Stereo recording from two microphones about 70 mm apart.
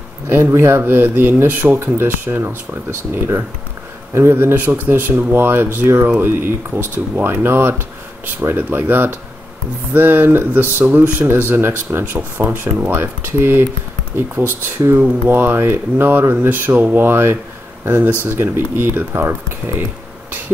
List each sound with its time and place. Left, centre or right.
0.3 s speech: right